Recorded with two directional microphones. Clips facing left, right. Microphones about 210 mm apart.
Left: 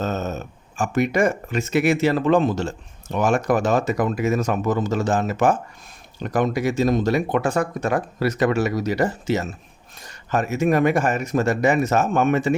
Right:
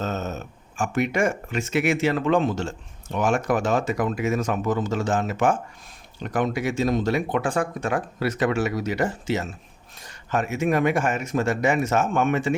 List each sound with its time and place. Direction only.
0.0 s speech: 40° left (ahead or behind)